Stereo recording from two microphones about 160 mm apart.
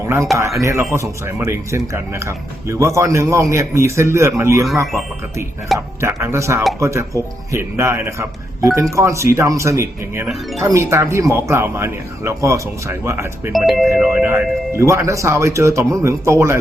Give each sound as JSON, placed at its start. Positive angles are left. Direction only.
{"t": 0.6, "sound": "speech", "side_deg": -20}
{"t": 6.0, "sound": "speech", "side_deg": -15}
{"t": 13.5, "sound": "speech", "side_deg": 0}